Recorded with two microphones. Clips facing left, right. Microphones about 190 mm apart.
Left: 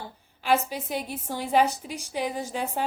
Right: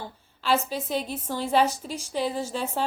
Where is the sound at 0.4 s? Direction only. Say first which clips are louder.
Even; 15° left (ahead or behind).